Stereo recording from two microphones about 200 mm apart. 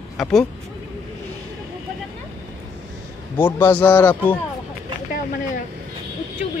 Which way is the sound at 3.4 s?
10° left (ahead or behind).